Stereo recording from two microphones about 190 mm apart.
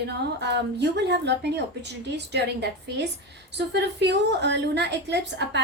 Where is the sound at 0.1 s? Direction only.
65° right (ahead or behind).